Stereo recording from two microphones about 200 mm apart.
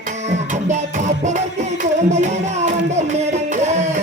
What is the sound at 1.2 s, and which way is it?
Music, 35° right (ahead or behind).